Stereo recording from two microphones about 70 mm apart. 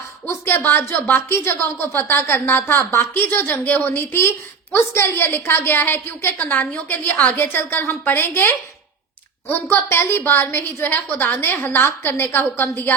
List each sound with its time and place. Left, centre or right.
0.3 s a woman's voice: left